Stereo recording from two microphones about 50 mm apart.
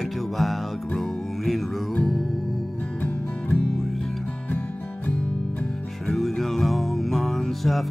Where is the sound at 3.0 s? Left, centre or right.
Left.